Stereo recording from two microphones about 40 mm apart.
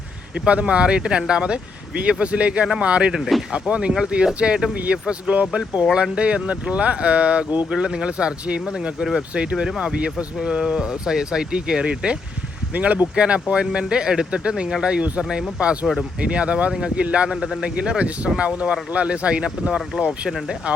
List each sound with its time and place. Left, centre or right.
0.3 s speech: right
3.1 s speech: centre
3.5 s speech: right
7.7 s speech: centre
9.0 s speech: centre
9.3 s speech: right
9.6 s speech: centre
9.9 s speech: right
10.4 s speech: centre
12.7 s speech: right
13.1 s speech: right
15.6 s speech: right
19.9 s speech: centre
20.7 s speech: right